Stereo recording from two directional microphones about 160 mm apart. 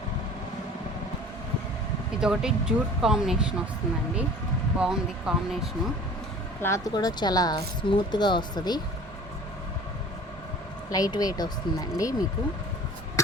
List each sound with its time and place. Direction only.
2.2 s speech: 5° right (ahead or behind)
4.8 s speech: 5° right (ahead or behind)
6.6 s speech: 20° left (ahead or behind)
10.8 s speech: 25° left (ahead or behind)
13.2 s a sound: 20° left (ahead or behind)